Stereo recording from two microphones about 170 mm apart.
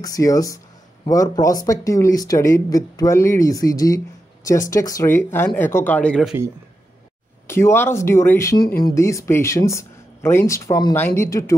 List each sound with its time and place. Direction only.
0.0 s speech: 20° left (ahead or behind)
7.4 s speech: 15° left (ahead or behind)